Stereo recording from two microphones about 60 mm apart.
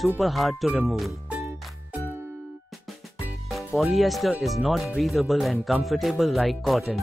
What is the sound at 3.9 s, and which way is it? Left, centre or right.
Speech, centre.